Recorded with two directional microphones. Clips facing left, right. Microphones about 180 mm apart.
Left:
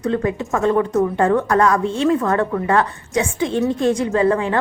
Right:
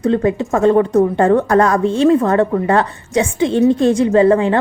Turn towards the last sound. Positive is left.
turn(degrees=-30)  # may be behind; listen again after turning